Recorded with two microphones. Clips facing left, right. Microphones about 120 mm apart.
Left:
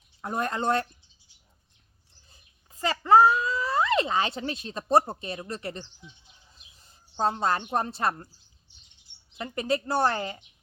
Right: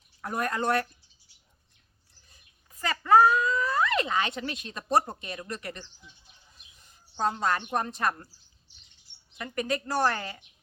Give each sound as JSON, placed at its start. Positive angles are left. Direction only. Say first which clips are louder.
{"t": 0.2, "sound": "a woman's voice", "louder": "left 1 dB", "side_deg": 25}
{"t": 2.3, "sound": "a child's voice", "louder": "left 1 dB", "side_deg": 30}
{"t": 9.4, "sound": "a woman's voice", "louder": "left 3 dB", "side_deg": 30}